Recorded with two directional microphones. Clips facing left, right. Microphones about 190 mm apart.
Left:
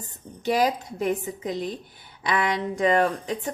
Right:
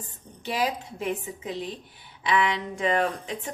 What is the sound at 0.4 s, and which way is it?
A woman's voice, 40° left (ahead or behind).